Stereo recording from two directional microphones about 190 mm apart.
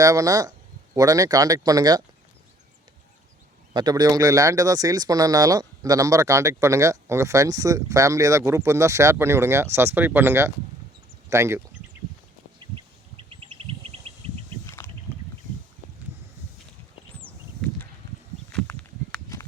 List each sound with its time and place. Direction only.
0.0 s speech: 20° right (ahead or behind)
3.8 s speech: 20° right (ahead or behind)
12.7 s bird: 25° right (ahead or behind)
14.8 s rowboat: 10° left (ahead or behind)
17.2 s a sound: 5° left (ahead or behind)